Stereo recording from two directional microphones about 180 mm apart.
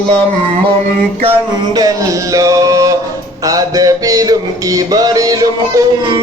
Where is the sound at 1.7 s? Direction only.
20° right (ahead or behind).